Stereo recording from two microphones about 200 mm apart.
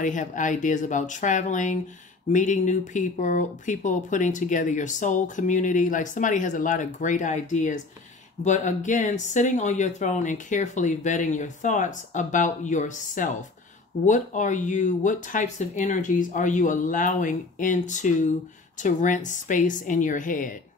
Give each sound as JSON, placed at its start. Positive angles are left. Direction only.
{"t": 0.0, "sound": "speech", "side_deg": 40}